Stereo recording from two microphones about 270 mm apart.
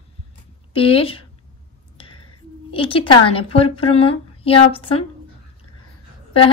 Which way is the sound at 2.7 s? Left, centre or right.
Centre.